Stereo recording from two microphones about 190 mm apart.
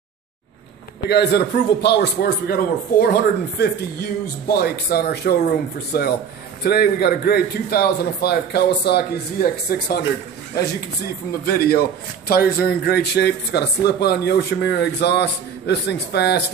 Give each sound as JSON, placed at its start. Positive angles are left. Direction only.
{"t": 1.1, "sound": "a man's voice", "side_deg": 60}
{"t": 11.5, "sound": "a man's voice", "side_deg": 55}